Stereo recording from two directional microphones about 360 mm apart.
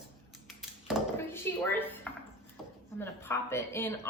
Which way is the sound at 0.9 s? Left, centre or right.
Centre.